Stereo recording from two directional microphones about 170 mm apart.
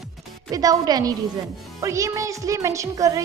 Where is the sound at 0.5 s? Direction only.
20° right (ahead or behind).